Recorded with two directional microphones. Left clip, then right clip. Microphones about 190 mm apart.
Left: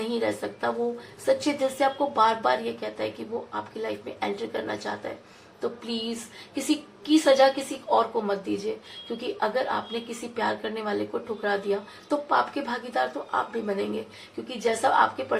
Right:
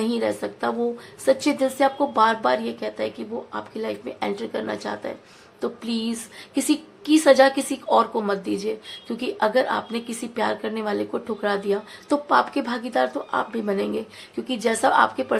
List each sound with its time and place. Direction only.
0.0 s a woman's voice: 35° right (ahead or behind)